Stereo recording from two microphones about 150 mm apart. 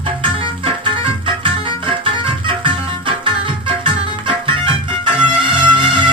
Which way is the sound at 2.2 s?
35° right (ahead or behind).